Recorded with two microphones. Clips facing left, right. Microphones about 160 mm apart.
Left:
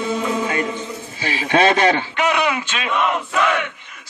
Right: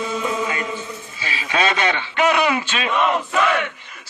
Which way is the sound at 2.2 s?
10° left (ahead or behind).